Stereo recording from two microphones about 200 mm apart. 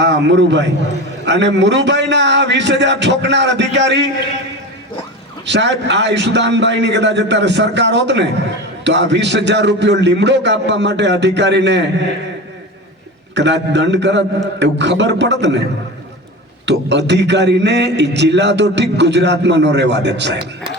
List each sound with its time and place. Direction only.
0.0 s a man's voice: 60° right (ahead or behind)
5.5 s a man's voice: 60° right (ahead or behind)
13.3 s a man's voice: 60° right (ahead or behind)
16.6 s a man's voice: 60° right (ahead or behind)